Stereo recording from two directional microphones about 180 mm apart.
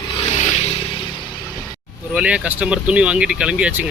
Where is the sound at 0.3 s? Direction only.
40° left (ahead or behind).